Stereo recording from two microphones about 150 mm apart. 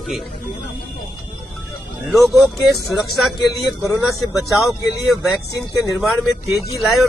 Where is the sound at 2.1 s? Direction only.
Centre (ahead or behind).